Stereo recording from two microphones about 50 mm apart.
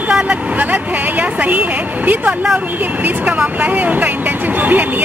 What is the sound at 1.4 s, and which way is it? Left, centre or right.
Speech, right.